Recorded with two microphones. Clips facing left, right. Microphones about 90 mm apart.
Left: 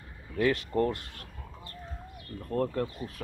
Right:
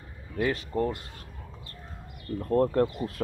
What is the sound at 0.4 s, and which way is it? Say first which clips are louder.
Speech: left 1 dB; 10° right (ahead or behind).